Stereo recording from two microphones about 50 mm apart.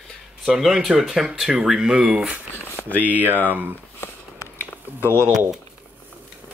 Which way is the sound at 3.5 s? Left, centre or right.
Right.